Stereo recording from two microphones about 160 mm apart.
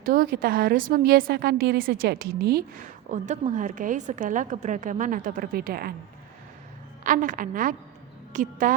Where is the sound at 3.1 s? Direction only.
50° right (ahead or behind); by 5.9 s 70° right (ahead or behind).